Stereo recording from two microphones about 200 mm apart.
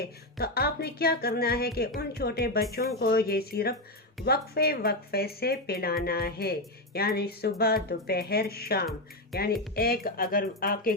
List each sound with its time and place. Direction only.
0.3 s speech: 50° left (ahead or behind)